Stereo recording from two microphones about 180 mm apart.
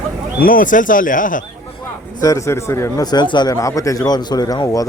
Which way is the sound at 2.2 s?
15° left (ahead or behind).